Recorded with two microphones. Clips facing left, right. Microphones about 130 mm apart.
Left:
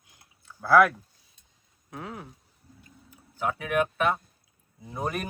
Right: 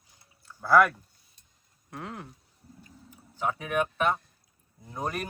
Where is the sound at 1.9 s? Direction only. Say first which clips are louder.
Left 1 dB; centre (ahead or behind).